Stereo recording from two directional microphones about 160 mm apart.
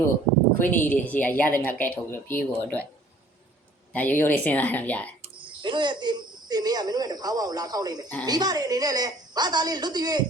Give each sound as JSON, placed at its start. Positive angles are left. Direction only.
{"t": 0.6, "sound": "a woman's voice", "side_deg": 10}
{"t": 3.9, "sound": "a woman's voice", "side_deg": 10}
{"t": 5.2, "sound": "a woman's voice", "side_deg": -30}